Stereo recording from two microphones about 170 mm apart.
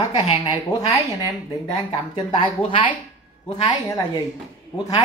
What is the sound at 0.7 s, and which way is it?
Speech, 20° left (ahead or behind).